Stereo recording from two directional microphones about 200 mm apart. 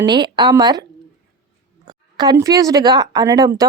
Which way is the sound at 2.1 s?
20° right (ahead or behind).